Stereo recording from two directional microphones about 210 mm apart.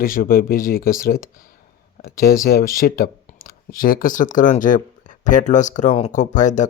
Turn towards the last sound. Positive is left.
turn(degrees=35)  # may be behind; listen again after turning